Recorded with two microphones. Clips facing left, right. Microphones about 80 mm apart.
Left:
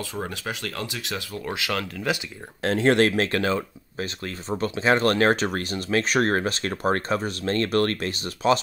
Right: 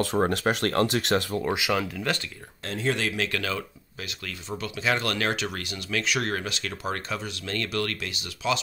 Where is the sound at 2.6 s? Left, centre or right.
Left.